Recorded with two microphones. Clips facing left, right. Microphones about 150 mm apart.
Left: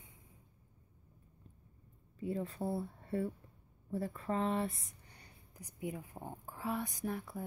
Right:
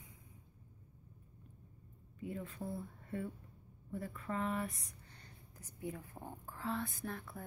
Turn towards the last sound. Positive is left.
turn(degrees=10)  # may be behind; listen again after turning